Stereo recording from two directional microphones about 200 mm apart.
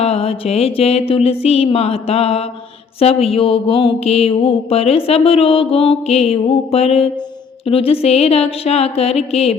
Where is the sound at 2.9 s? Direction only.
30° left (ahead or behind).